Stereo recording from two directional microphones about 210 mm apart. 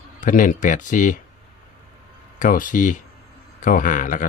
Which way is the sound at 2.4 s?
40° left (ahead or behind).